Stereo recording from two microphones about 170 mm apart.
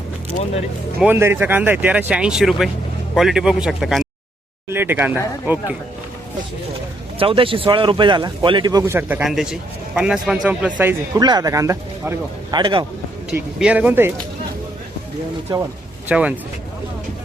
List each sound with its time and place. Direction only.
0.9 s a man's voice: 10° right (ahead or behind)
4.7 s speech: 10° right (ahead or behind)
7.2 s speech: 30° right (ahead or behind)
9.0 s a man's voice: 10° right (ahead or behind)
11.1 s speech: 20° right (ahead or behind)
13.3 s speech: 5° right (ahead or behind)
16.0 s speech: 10° right (ahead or behind)